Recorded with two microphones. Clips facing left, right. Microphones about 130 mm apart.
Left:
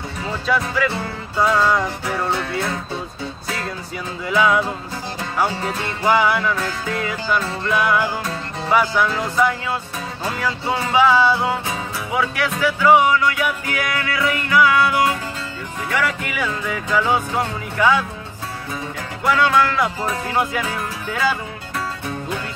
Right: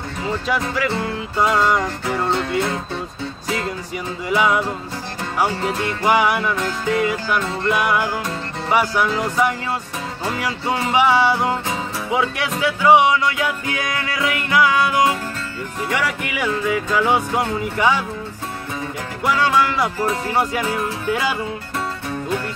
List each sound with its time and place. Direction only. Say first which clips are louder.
0.2 s music: even; 15° right (ahead or behind)
4.3 s music: left 1 dB; 15° right (ahead or behind)
10.9 s music: left 1 dB; 15° right (ahead or behind)
19.2 s music: left 1 dB; 10° right (ahead or behind)